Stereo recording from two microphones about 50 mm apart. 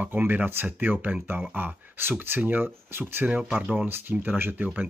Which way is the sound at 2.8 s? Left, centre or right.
Right.